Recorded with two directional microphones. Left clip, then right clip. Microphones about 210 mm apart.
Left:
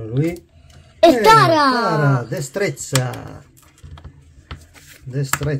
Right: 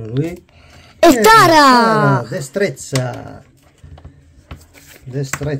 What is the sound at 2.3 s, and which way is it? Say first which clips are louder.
Speech: right 3 dB; 15° right (ahead or behind).